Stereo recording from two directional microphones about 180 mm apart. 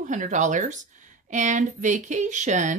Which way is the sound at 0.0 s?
45° right (ahead or behind).